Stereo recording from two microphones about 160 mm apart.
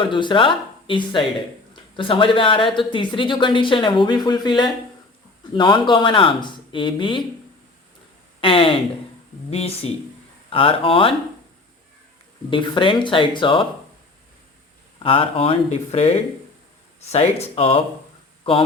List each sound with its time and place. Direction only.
0.0 s speech: 30° left (ahead or behind)
8.4 s speech: 35° left (ahead or behind)
12.5 s speech: 30° left (ahead or behind)
14.9 s speech: 35° left (ahead or behind)